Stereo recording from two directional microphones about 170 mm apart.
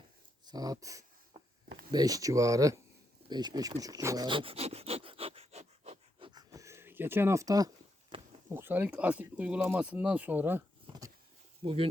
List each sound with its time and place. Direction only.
0.4 s a sound: 20° right (ahead or behind)
1.9 s speech: 20° right (ahead or behind)
3.2 s rub: 25° right (ahead or behind)
8.4 s speech: 10° right (ahead or behind)
11.6 s speech: 35° right (ahead or behind)